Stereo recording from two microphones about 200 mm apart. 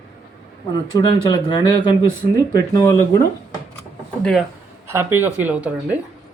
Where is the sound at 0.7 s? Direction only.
20° left (ahead or behind).